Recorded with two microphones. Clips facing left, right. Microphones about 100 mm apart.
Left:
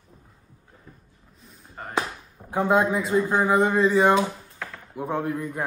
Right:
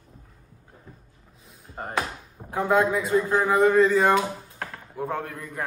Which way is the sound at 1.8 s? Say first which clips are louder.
Right 3 dB; 25° right (ahead or behind).